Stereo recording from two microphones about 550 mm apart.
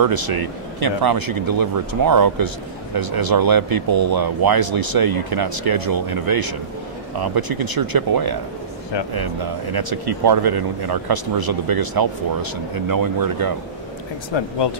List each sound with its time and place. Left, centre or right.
0.0 s speech: right
14.3 s speech: left